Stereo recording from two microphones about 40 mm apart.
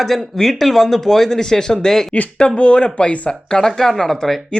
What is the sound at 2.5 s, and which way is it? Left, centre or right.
Speech, left.